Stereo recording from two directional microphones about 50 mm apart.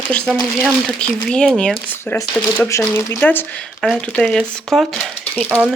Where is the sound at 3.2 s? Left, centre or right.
Left.